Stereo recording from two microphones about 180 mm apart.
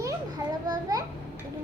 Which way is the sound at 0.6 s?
20° right (ahead or behind).